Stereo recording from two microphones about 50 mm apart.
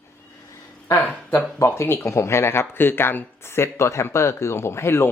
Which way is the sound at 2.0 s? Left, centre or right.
Left.